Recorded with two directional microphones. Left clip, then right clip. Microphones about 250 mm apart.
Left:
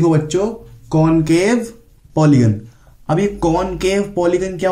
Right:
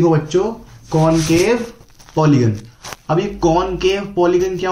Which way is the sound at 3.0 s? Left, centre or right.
Left.